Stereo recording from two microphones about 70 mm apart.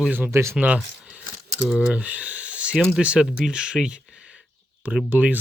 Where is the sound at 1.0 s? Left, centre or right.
Centre.